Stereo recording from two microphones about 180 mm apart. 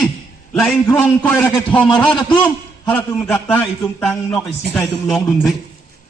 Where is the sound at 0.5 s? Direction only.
5° left (ahead or behind).